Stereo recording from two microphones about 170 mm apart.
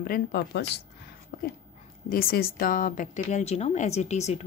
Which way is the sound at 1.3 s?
65° left (ahead or behind).